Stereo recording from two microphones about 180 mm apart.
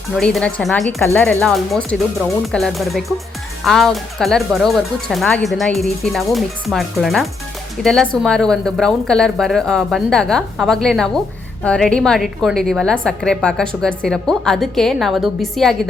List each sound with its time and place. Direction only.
0.2 s a woman's voice: 5° left (ahead or behind)